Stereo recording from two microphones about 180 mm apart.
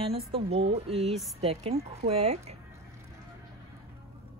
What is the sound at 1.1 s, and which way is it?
Speech, centre (ahead or behind).